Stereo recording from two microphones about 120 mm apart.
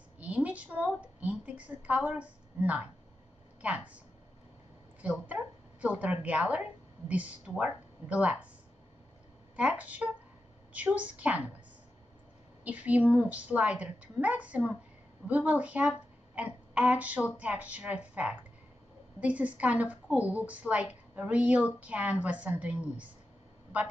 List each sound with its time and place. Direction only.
0.2 s a sound: 10° right (ahead or behind)
3.6 s a woman's voice: 10° right (ahead or behind)
5.0 s a woman's voice: 10° right (ahead or behind)
9.6 s a woman's voice: 10° right (ahead or behind)
12.6 s a woman's voice: 10° right (ahead or behind)